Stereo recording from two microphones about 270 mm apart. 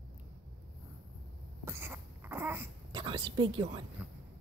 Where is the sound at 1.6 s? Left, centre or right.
Centre.